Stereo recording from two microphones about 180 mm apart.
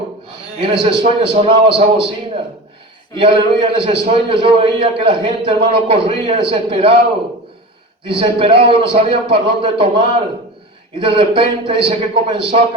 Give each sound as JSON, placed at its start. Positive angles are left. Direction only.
{"t": 0.6, "sound": "a man's voice", "side_deg": -30}
{"t": 8.2, "sound": "a man's voice", "side_deg": -30}